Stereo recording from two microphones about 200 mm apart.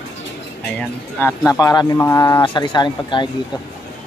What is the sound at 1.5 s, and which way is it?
Speech, 15° left (ahead or behind).